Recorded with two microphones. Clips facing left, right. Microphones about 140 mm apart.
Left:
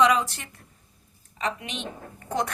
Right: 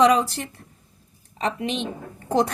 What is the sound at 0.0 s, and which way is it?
A woman's voice, 35° right (ahead or behind).